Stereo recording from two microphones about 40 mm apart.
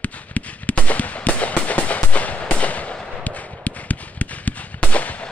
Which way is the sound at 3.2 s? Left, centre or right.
Left.